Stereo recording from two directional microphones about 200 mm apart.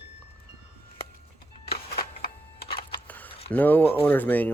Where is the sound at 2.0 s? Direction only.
50° left (ahead or behind).